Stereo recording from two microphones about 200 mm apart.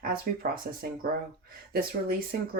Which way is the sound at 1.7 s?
50° right (ahead or behind).